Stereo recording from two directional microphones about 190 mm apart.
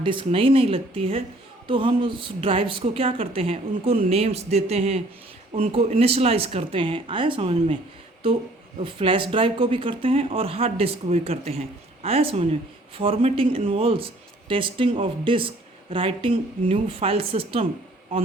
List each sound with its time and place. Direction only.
0.0 s speech: 25° right (ahead or behind)
8.8 s speech: 30° right (ahead or behind)